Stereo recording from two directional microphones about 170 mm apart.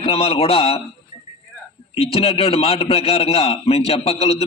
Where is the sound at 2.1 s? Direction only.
35° left (ahead or behind).